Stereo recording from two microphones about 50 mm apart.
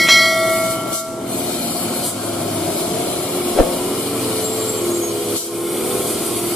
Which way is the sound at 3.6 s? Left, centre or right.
Centre.